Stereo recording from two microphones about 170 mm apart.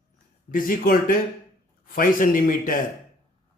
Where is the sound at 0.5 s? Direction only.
55° left (ahead or behind).